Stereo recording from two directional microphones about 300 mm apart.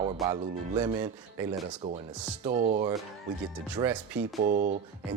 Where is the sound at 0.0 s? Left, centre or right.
Centre.